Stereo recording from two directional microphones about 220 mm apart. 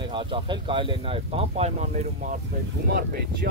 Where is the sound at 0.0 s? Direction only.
20° right (ahead or behind).